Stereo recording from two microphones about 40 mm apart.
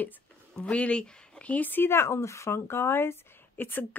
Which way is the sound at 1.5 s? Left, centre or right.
Left.